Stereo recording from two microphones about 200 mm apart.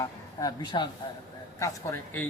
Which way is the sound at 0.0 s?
20° left (ahead or behind).